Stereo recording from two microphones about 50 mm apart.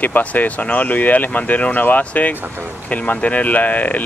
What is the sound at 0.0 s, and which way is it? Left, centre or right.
Speech, left.